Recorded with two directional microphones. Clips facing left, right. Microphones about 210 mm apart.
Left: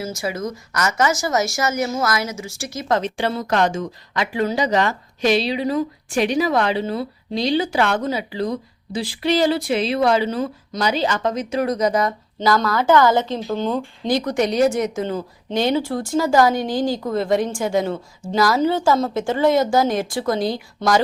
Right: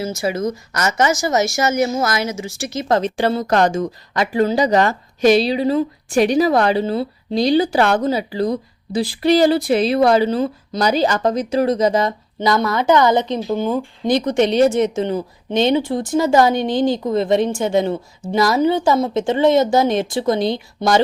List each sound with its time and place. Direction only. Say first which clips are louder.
0.2 s speech: right 5 dB; 25° right (ahead or behind)
2.7 s a woman's voice: right 3 dB; 35° right (ahead or behind); by 13.8 s 10° right (ahead or behind)
14.1 s speech: right 4 dB; 20° right (ahead or behind)